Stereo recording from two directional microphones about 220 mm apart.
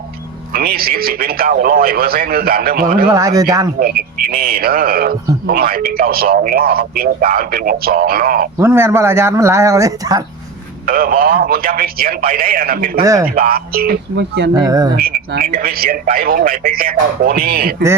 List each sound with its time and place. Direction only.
0.5 s a man's voice: 45° right (ahead or behind)
3.1 s speech: 15° right (ahead or behind)
3.8 s a man's voice: 40° right (ahead or behind)
8.5 s speech: 10° right (ahead or behind)
10.8 s a man's voice: 40° right (ahead or behind)
14.5 s speech: 15° right (ahead or behind)
14.9 s a man's voice: 45° right (ahead or behind)